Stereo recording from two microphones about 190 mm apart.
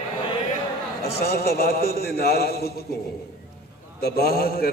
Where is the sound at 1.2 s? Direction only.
55° left (ahead or behind).